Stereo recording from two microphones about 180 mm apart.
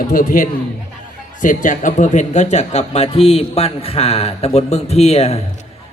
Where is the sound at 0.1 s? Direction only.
50° left (ahead or behind).